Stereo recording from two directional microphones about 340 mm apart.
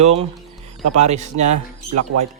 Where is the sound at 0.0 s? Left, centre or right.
Centre.